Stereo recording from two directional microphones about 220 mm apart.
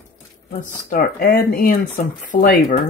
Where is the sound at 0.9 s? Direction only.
40° left (ahead or behind).